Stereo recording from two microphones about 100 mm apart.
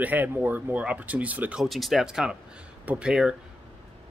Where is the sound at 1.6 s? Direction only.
Centre (ahead or behind).